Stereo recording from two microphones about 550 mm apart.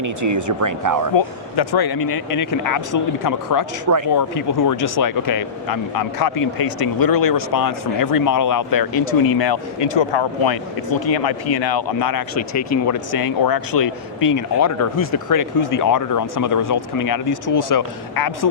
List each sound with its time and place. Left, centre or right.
0.0 s speech: right
1.1 s speech: left